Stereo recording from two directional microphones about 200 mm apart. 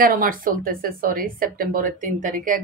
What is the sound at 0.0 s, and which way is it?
Speech, 45° right (ahead or behind).